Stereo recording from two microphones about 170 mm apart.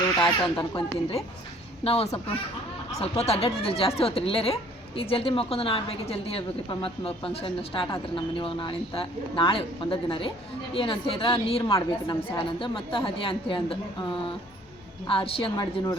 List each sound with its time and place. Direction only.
0.2 s speech: 5° left (ahead or behind)
0.7 s speech: 30° left (ahead or behind)